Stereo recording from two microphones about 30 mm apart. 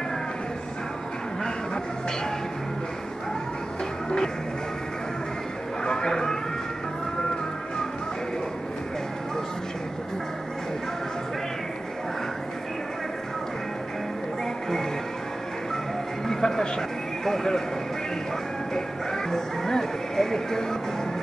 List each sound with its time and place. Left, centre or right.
5.9 s a sound: left
16.3 s music: centre
19.3 s speech: centre